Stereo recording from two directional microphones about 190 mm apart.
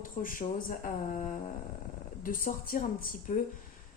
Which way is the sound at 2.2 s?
45° left (ahead or behind).